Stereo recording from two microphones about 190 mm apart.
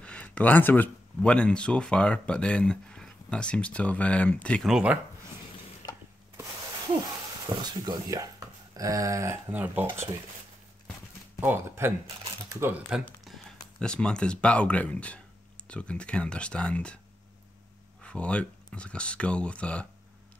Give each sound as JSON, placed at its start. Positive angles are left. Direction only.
{"t": 0.0, "sound": "speech", "side_deg": 5}
{"t": 7.4, "sound": "speech", "side_deg": -20}
{"t": 11.4, "sound": "speech", "side_deg": -10}
{"t": 13.0, "sound": "speech", "side_deg": 0}
{"t": 18.0, "sound": "speech", "side_deg": 5}